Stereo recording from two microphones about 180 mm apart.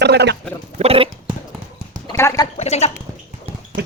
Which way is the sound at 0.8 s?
30° right (ahead or behind).